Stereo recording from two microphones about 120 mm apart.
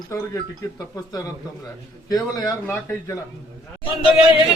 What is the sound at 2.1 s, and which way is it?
Speech, 30° left (ahead or behind).